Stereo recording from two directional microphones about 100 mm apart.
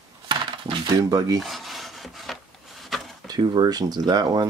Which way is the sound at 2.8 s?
Centre (ahead or behind).